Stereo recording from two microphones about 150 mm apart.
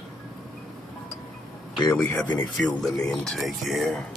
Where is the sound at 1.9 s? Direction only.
10° left (ahead or behind).